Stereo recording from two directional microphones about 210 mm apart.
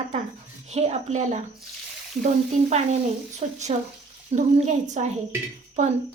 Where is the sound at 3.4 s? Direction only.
30° right (ahead or behind).